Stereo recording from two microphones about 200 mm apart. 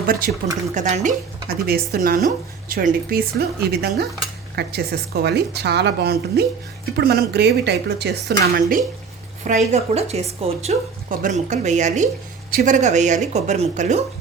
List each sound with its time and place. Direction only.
0.7 s speech: 35° right (ahead or behind)
9.4 s a woman's voice: 35° right (ahead or behind)